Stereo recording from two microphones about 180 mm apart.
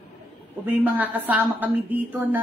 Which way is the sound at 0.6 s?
10° right (ahead or behind).